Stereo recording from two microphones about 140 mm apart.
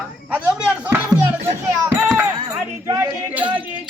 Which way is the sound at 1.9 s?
15° right (ahead or behind).